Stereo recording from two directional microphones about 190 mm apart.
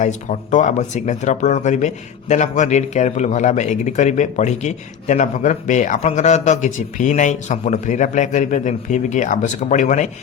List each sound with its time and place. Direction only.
0.0 s speech: 40° left (ahead or behind)